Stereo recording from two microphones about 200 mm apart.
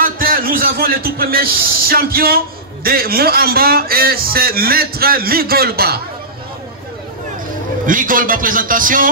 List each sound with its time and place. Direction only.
0.0 s speech: 45° right (ahead or behind)
7.8 s a man's voice: 45° right (ahead or behind)